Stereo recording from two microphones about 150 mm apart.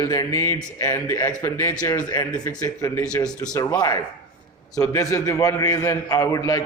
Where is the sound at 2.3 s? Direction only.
5° left (ahead or behind).